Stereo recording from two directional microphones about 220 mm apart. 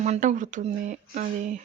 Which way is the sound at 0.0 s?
30° right (ahead or behind).